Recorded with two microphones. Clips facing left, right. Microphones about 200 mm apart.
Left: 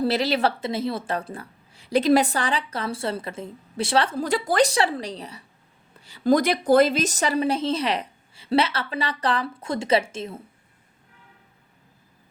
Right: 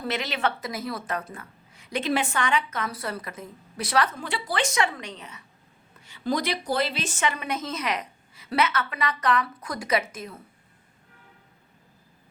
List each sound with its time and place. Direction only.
0.0 s a woman's voice: 35° left (ahead or behind)